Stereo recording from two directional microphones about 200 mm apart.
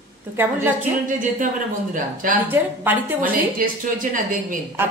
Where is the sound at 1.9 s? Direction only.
40° right (ahead or behind).